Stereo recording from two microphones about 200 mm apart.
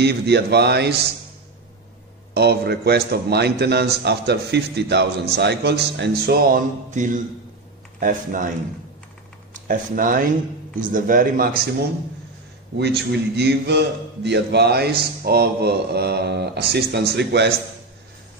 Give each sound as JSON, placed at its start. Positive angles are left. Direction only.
{"t": 0.0, "sound": "a man's voice", "side_deg": -55}
{"t": 2.3, "sound": "a man's voice", "side_deg": -55}
{"t": 9.5, "sound": "a man's voice", "side_deg": -45}
{"t": 12.7, "sound": "a man's voice", "side_deg": -55}